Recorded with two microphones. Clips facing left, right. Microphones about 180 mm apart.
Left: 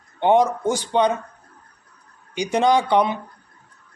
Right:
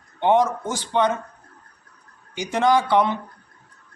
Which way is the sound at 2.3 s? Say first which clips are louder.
Left 1 dB; 15° left (ahead or behind).